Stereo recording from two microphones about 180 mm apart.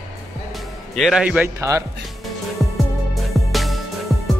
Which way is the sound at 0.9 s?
Centre (ahead or behind).